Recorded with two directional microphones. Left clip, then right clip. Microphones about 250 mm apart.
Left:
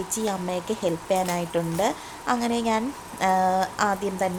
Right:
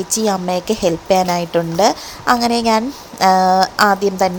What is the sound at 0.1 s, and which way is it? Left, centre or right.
A woman's voice, right.